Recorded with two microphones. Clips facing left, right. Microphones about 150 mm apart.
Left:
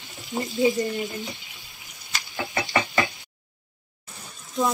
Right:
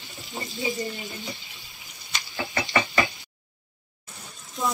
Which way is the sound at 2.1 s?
Centre (ahead or behind).